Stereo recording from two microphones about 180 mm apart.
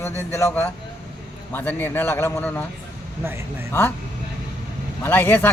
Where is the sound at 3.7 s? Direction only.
10° left (ahead or behind).